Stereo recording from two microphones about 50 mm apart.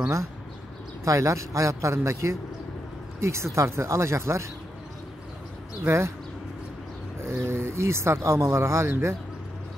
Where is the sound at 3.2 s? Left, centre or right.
Right.